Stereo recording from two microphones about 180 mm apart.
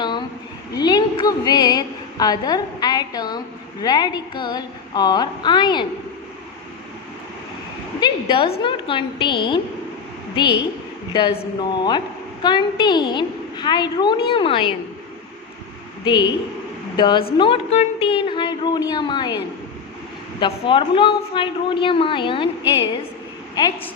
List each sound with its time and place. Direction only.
0.8 s a woman's voice: 20° left (ahead or behind)
8.0 s a woman's voice: 30° left (ahead or behind)
11.8 s a woman's voice: 25° left (ahead or behind)
16.0 s a woman's voice: 25° left (ahead or behind)
20.4 s a woman's voice: 30° left (ahead or behind)